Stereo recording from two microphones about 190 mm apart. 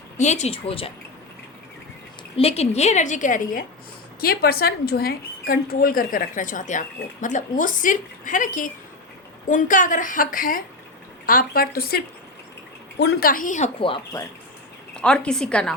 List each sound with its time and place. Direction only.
0.2 s a woman's voice: 35° left (ahead or behind)
2.3 s a woman's voice: 30° left (ahead or behind)
13.7 s speech: 25° left (ahead or behind)
14.9 s a woman's voice: 5° left (ahead or behind)